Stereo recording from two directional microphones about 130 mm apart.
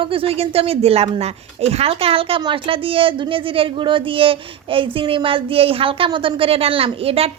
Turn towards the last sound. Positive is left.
turn(degrees=-50)  # may be behind; listen again after turning